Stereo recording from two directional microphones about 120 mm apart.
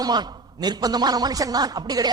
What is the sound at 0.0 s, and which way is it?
A man's voice, 35° right (ahead or behind).